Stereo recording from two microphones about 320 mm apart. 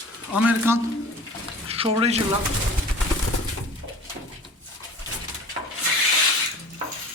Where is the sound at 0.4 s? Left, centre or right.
Centre.